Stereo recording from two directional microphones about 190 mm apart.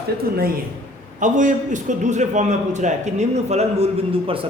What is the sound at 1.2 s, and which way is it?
A man's voice, 40° right (ahead or behind).